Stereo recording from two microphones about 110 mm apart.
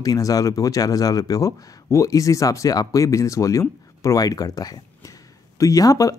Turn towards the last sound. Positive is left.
turn(degrees=30)  # may be behind; listen again after turning